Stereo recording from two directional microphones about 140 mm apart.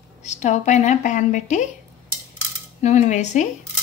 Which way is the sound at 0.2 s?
55° left (ahead or behind).